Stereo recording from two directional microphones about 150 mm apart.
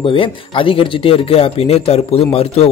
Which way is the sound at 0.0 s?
35° left (ahead or behind).